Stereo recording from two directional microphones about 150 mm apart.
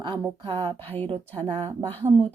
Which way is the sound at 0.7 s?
15° left (ahead or behind).